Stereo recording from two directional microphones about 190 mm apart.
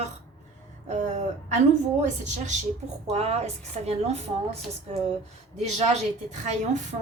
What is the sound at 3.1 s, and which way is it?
A woman's voice, 35° right (ahead or behind).